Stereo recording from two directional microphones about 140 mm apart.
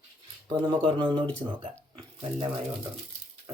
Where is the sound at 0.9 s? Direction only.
35° right (ahead or behind).